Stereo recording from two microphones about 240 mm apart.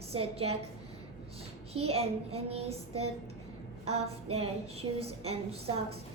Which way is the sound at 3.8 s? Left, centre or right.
Right.